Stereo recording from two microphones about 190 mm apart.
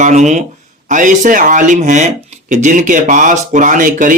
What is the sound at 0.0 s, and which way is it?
Speech, 40° right (ahead or behind).